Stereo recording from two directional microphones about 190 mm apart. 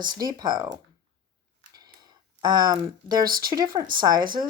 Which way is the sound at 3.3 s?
50° right (ahead or behind).